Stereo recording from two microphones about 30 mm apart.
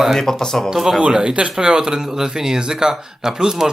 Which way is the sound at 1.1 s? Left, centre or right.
Right.